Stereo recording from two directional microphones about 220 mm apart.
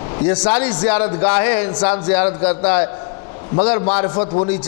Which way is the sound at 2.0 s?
10° left (ahead or behind).